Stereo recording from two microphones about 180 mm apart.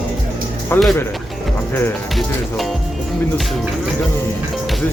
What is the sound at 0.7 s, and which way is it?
Speech, 10° left (ahead or behind).